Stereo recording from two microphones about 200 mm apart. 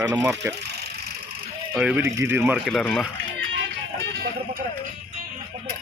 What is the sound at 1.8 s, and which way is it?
Speech, 10° right (ahead or behind).